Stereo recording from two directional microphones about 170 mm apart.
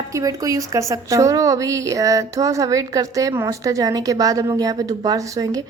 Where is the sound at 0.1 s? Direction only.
20° right (ahead or behind).